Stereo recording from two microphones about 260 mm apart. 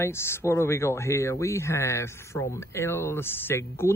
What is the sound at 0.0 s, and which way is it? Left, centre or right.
Speech, centre.